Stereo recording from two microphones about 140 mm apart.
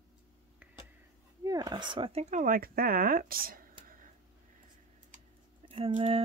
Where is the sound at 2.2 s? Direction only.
70° right (ahead or behind); by 4.1 s 85° right.